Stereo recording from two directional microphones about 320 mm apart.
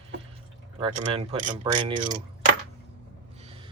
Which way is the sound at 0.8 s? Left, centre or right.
Centre.